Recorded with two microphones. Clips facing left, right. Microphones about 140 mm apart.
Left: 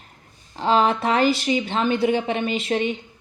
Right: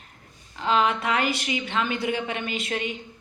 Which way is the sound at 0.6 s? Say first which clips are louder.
Left 4 dB; 30° left (ahead or behind).